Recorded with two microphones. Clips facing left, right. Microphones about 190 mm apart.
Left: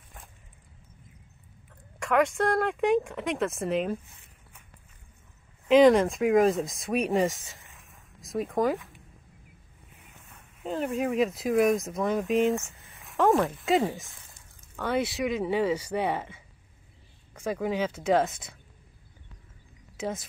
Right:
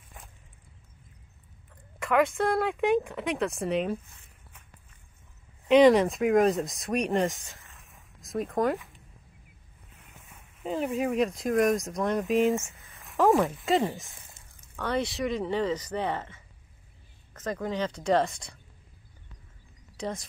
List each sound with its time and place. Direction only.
2.0 s speech: centre (ahead or behind)
5.7 s speech: centre (ahead or behind)
7.7 s a sound: centre (ahead or behind)
10.3 s speech: centre (ahead or behind)
20.0 s speech: 5° left (ahead or behind)